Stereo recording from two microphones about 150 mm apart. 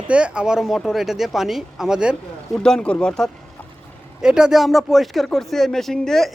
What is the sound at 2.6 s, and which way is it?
Speech, 5° left (ahead or behind).